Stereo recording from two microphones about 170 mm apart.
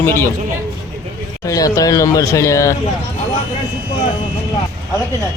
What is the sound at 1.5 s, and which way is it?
Speech, 20° left (ahead or behind).